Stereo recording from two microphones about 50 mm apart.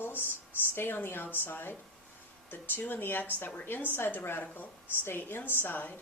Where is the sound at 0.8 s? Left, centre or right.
Left.